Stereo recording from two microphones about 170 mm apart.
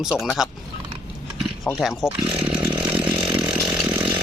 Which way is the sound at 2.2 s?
10° right (ahead or behind).